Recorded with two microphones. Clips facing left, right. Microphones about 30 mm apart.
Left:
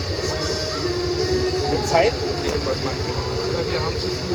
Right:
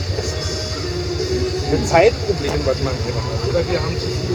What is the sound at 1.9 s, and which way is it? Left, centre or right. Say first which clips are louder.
Speech: right 5 dB; right.